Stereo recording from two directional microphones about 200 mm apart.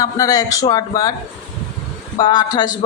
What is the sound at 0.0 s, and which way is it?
A woman's voice, 20° left (ahead or behind).